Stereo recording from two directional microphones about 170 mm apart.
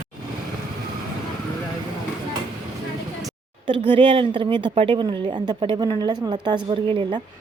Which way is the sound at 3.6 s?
30° right (ahead or behind).